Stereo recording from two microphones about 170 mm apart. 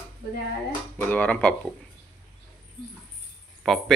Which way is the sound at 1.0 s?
10° left (ahead or behind).